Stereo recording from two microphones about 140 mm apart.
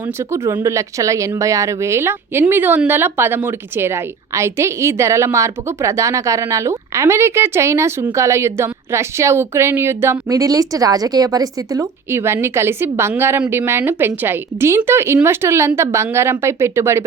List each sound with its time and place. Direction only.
0.3 s a woman's voice: 20° right (ahead or behind)